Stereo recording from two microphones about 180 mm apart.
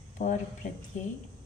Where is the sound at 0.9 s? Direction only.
45° left (ahead or behind).